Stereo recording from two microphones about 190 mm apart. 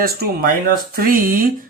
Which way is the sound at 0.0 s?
50° right (ahead or behind).